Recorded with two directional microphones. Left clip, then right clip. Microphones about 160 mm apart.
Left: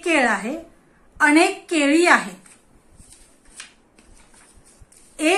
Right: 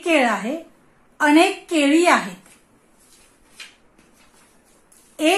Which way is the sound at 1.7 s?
50° right (ahead or behind).